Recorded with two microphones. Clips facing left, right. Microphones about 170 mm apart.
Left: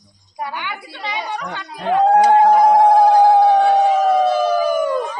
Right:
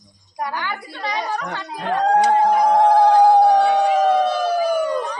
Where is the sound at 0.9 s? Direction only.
5° left (ahead or behind).